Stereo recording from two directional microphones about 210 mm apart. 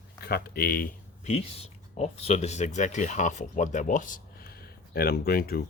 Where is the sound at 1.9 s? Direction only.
30° left (ahead or behind).